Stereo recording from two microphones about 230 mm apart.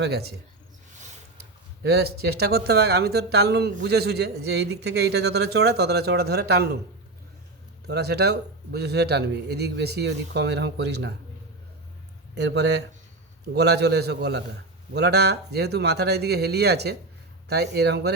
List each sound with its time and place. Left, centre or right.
0.0 s speech: right
1.8 s speech: right
7.9 s speech: right
12.3 s speech: right